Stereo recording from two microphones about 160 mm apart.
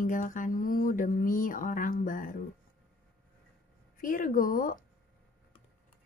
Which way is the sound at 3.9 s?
60° left (ahead or behind).